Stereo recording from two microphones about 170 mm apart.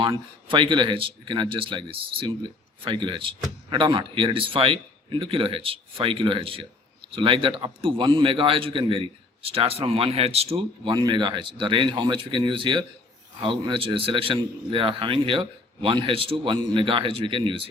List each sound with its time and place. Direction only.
0.0 s a man's voice: 30° right (ahead or behind)